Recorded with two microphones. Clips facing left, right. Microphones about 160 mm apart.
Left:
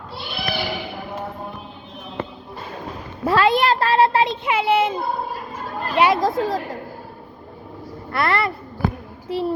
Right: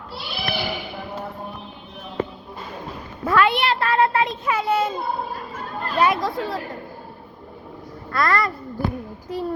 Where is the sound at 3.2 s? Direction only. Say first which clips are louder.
Left 2 dB; 30° left (ahead or behind).